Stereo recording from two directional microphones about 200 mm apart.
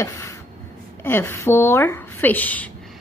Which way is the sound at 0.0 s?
15° left (ahead or behind).